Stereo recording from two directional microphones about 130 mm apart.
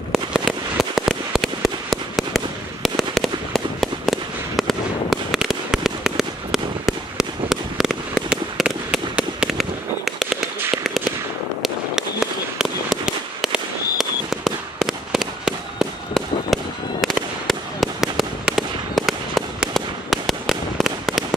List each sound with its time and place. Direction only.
0.1 s fireworks: centre (ahead or behind)
11.6 s fireworks: 5° right (ahead or behind)